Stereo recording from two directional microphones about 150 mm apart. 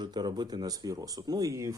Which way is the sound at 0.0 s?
30° right (ahead or behind).